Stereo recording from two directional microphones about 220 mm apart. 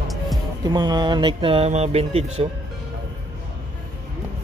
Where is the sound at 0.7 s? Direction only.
20° right (ahead or behind).